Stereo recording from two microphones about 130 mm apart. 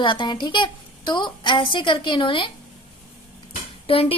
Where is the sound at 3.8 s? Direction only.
45° left (ahead or behind).